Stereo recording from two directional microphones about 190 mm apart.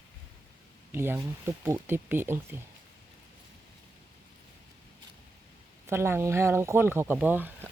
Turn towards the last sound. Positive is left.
turn(degrees=-10)  # may be behind; listen again after turning